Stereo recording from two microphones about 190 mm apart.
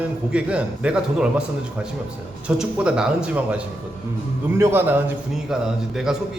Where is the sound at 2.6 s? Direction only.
5° right (ahead or behind).